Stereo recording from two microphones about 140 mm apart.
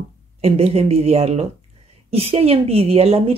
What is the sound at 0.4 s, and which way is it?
Speech, 45° right (ahead or behind).